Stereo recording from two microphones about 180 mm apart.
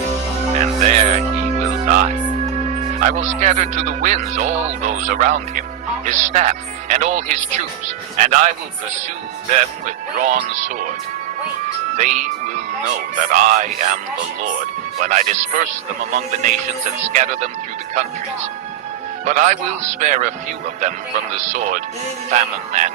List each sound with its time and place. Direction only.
0.6 s music: 40° right (ahead or behind)
2.8 s a man's voice: 45° right (ahead or behind)
11.9 s speech: 45° right (ahead or behind)
19.2 s a man's voice: 40° right (ahead or behind)
21.3 s a man's voice: 40° right (ahead or behind)